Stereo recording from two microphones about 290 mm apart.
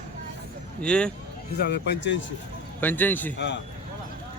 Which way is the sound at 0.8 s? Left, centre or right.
Centre.